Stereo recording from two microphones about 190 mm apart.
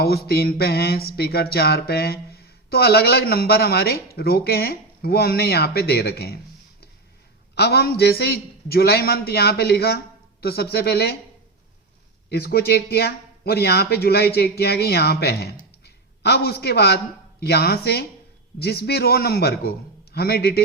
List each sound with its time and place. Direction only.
0.0 s speech: 55° left (ahead or behind)
7.5 s speech: 60° left (ahead or behind)
12.3 s a man's voice: 55° left (ahead or behind)